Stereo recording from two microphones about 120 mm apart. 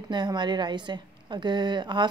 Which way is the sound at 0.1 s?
40° right (ahead or behind).